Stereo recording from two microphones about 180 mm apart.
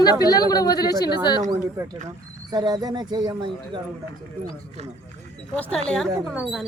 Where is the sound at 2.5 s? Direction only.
20° right (ahead or behind).